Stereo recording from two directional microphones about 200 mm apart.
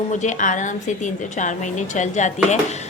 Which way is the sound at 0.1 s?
35° left (ahead or behind).